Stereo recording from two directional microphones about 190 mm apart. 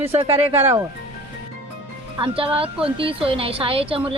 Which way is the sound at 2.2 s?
30° right (ahead or behind).